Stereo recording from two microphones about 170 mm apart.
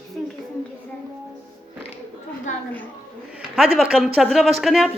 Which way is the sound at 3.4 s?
5° right (ahead or behind).